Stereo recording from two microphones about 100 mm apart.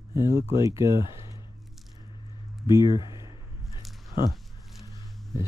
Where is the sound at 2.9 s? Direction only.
50° left (ahead or behind).